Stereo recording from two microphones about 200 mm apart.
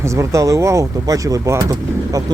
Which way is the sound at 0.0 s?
15° right (ahead or behind).